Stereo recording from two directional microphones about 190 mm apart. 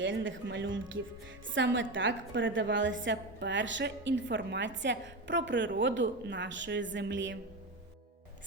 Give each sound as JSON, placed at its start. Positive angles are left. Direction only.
{"t": 0.0, "sound": "a woman's voice", "side_deg": -80}